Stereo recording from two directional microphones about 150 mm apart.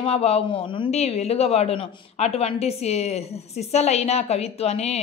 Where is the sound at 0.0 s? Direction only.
45° left (ahead or behind).